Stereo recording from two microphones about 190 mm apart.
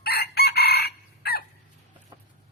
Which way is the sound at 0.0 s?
55° left (ahead or behind).